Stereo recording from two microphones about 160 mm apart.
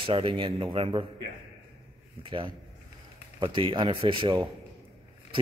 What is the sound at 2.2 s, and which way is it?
Speech, 30° right (ahead or behind).